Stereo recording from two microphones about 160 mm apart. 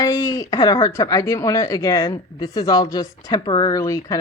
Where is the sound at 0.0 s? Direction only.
20° left (ahead or behind).